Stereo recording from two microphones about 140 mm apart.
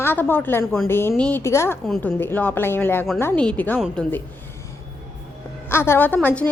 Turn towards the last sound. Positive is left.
turn(degrees=10)  # may be behind; listen again after turning